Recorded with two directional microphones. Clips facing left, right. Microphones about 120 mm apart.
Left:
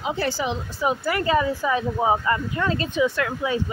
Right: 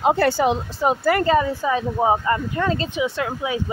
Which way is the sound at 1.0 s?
40° right (ahead or behind).